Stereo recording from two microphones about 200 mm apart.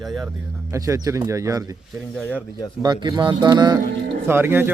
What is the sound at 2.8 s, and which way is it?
Speech, 20° right (ahead or behind).